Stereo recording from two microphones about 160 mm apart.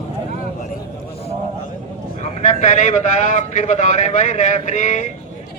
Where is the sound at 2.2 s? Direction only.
45° left (ahead or behind).